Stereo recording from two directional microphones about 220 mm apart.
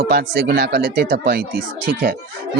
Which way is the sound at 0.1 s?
50° right (ahead or behind).